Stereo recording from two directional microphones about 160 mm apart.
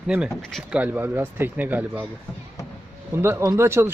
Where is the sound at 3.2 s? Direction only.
15° right (ahead or behind).